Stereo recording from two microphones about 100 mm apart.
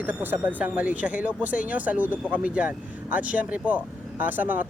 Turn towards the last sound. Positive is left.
turn(degrees=-20)  # may be behind; listen again after turning